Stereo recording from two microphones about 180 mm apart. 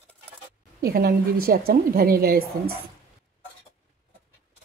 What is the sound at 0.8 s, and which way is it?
A woman's voice, 60° right (ahead or behind).